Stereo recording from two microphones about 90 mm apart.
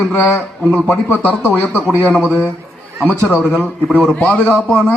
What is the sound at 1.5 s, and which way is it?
Speech, 15° left (ahead or behind).